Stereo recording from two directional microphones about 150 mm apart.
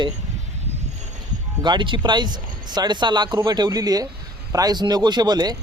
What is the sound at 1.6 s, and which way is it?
Speech, 30° right (ahead or behind).